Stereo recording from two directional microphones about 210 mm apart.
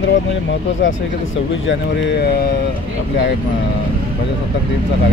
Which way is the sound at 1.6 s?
55° left (ahead or behind).